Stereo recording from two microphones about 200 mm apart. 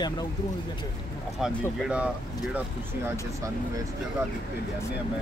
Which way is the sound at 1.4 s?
Centre (ahead or behind).